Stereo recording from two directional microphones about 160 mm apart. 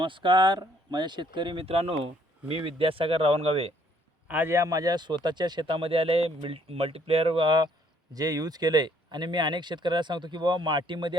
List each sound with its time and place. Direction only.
0.0 s speech: 30° right (ahead or behind)
4.3 s speech: 15° right (ahead or behind); by 11.2 s 30° right (ahead or behind)